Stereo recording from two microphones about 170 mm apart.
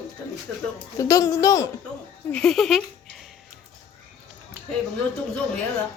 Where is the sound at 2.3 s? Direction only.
5° left (ahead or behind).